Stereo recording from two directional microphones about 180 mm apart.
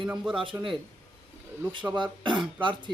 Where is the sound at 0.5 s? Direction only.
15° right (ahead or behind).